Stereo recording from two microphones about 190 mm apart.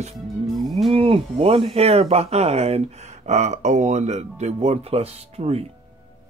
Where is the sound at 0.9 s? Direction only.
30° right (ahead or behind).